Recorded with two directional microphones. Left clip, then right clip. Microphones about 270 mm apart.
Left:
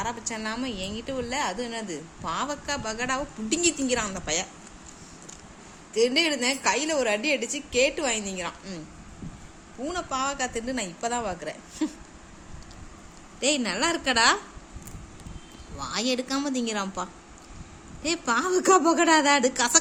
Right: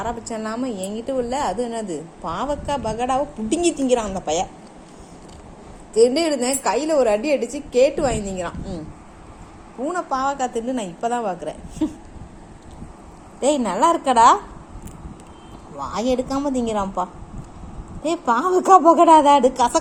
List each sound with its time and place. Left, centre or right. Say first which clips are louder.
0.0 s a woman's voice: right 4 dB; centre
6.0 s a woman's voice: right 6 dB; centre
9.8 s a woman's voice: right 7 dB; centre
13.4 s a woman's voice: right 8 dB; centre
16.0 s a woman's voice: right 6 dB; centre
16.7 s a woman's voice: right 8 dB; left
18.0 s a woman's voice: right 6 dB; centre